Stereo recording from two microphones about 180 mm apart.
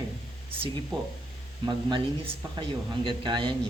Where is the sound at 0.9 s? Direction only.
30° right (ahead or behind).